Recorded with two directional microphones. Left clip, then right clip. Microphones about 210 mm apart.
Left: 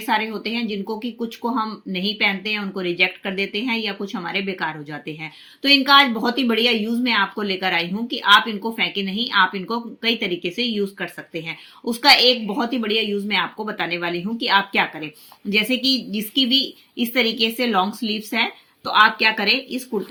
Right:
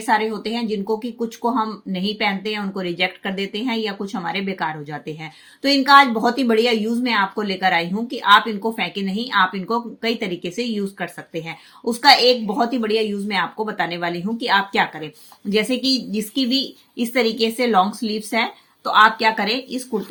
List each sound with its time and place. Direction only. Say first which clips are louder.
0.0 s speech: right 2 dB; 40° right (ahead or behind)